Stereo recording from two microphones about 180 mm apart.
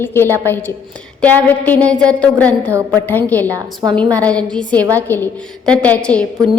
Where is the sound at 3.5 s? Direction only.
20° right (ahead or behind).